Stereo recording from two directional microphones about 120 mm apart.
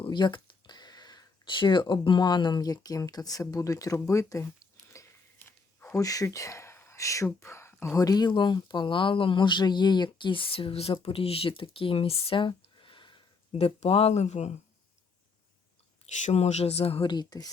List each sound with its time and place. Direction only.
0.0 s speech: 40° left (ahead or behind)
5.4 s a sound: 20° left (ahead or behind)
6.0 s speech: 30° left (ahead or behind); by 13.6 s 45° left (ahead or behind)
13.6 s speech: 60° left (ahead or behind)
16.2 s speech: 65° left (ahead or behind)
17.1 s speech: 35° left (ahead or behind)